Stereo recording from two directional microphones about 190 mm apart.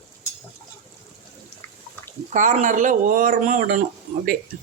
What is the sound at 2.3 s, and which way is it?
Speech, 40° right (ahead or behind).